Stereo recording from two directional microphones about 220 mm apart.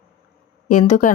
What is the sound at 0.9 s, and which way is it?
Speech, 35° left (ahead or behind).